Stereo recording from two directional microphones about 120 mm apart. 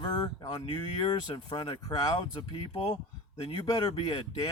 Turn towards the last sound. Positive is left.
turn(degrees=35)  # may be behind; listen again after turning